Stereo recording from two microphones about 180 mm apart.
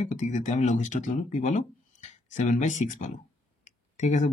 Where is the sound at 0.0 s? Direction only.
40° left (ahead or behind).